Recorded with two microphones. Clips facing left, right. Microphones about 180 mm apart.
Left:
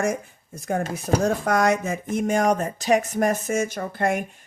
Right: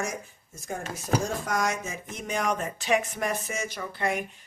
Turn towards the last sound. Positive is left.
turn(degrees=50)  # may be behind; listen again after turning